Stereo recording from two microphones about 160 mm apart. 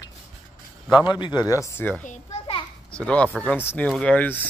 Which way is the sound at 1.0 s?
30° left (ahead or behind).